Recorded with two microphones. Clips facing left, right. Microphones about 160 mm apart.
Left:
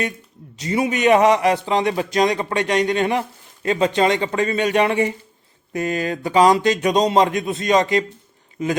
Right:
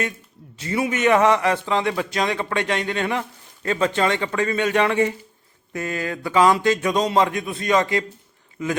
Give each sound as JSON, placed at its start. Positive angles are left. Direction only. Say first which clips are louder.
{"t": 0.5, "sound": "a man's voice", "louder": "left 3 dB", "side_deg": 20}
{"t": 2.2, "sound": "speech", "louder": "left 5 dB", "side_deg": 40}
{"t": 2.5, "sound": "speech", "louder": "left 4 dB", "side_deg": 20}